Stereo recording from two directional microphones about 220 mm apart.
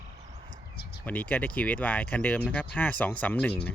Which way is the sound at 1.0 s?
5° left (ahead or behind).